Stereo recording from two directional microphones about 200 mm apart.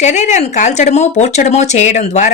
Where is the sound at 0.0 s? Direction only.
35° left (ahead or behind).